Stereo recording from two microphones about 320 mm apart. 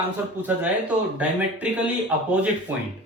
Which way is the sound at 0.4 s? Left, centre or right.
Centre.